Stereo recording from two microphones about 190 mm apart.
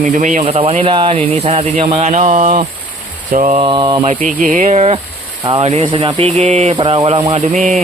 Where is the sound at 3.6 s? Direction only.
25° right (ahead or behind).